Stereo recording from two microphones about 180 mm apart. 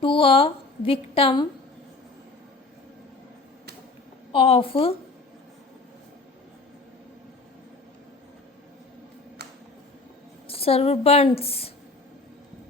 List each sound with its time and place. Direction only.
0.0 s a woman's voice: 30° left (ahead or behind)
4.3 s a woman's voice: 30° left (ahead or behind)
9.4 s a sound: 65° right (ahead or behind)
10.4 s a woman's voice: 30° left (ahead or behind)